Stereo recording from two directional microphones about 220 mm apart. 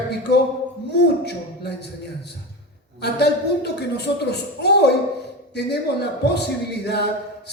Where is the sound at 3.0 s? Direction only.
50° left (ahead or behind).